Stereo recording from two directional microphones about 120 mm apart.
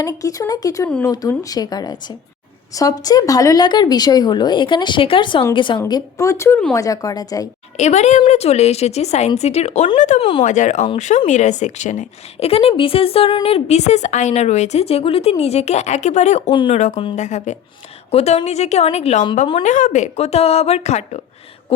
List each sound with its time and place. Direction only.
0.0 s speech: 30° left (ahead or behind)
5.9 s speech: 25° left (ahead or behind)
7.8 s a woman's voice: 70° left (ahead or behind)
10.2 s speech: 45° left (ahead or behind)
10.4 s speech: 90° left
10.9 s speech: 80° left
12.4 s speech: 55° left (ahead or behind); by 16.4 s 75° left (ahead or behind)
16.5 s speech: 40° left (ahead or behind)
16.7 s a woman's voice: 85° left
18.1 s speech: 55° left (ahead or behind)
19.6 s speech: 90° left; by 21.2 s 65° left (ahead or behind)
21.7 s speech: 50° left (ahead or behind)